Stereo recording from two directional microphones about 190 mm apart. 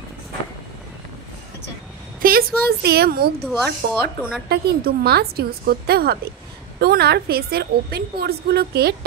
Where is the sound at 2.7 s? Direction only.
55° right (ahead or behind).